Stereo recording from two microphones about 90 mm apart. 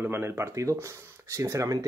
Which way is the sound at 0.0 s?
25° right (ahead or behind).